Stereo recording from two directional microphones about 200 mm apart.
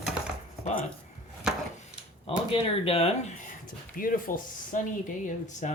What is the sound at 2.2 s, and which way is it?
Speech, 25° left (ahead or behind).